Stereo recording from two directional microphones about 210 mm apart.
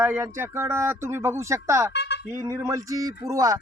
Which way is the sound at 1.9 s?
55° left (ahead or behind).